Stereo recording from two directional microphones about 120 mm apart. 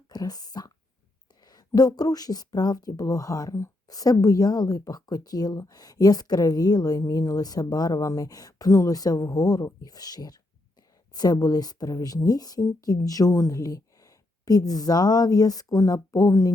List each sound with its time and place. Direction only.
0.1 s speech: 35° left (ahead or behind)